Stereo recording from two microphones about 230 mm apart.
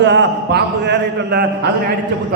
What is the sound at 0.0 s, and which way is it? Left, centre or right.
A man's voice, right.